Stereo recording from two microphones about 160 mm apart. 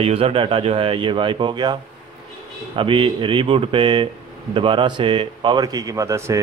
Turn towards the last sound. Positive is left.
turn(degrees=-20)  # may be behind; listen again after turning